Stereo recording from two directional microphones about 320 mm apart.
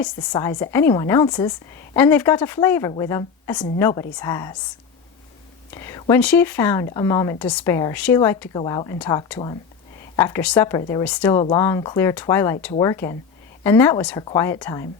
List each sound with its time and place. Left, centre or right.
0.0 s a woman's voice: centre
5.7 s a woman's voice: centre